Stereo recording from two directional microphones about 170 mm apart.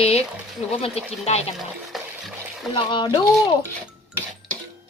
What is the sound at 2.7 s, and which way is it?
Speech, 30° left (ahead or behind).